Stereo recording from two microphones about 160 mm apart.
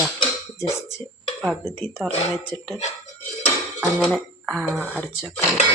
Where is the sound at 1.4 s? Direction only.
Centre (ahead or behind).